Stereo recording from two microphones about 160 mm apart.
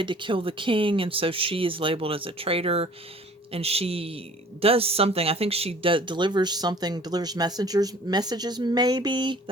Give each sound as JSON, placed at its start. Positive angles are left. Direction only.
{"t": 0.0, "sound": "speech", "side_deg": -30}